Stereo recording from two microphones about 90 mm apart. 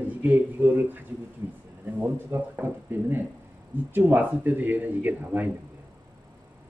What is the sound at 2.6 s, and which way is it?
Speech, 25° right (ahead or behind).